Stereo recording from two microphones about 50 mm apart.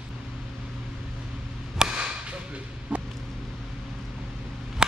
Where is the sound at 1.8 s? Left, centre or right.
Centre.